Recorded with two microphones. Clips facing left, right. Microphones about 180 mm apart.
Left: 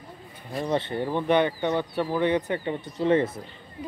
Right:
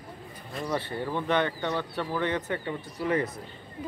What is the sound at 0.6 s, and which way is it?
Speech, 20° left (ahead or behind).